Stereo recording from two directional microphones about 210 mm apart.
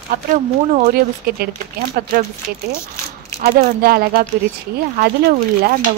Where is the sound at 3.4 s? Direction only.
45° right (ahead or behind).